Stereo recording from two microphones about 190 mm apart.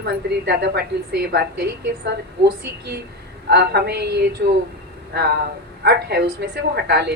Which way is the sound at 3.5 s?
60° right (ahead or behind).